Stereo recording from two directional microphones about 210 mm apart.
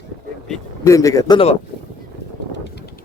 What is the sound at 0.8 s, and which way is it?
Speech, 15° left (ahead or behind).